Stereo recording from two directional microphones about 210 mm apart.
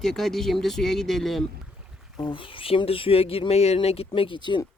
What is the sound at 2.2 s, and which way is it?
Speech, 25° left (ahead or behind).